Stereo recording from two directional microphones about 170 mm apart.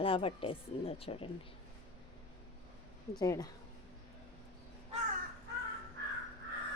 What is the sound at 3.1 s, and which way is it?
Speech, 20° left (ahead or behind).